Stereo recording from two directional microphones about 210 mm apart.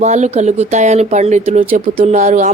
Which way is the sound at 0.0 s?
35° right (ahead or behind).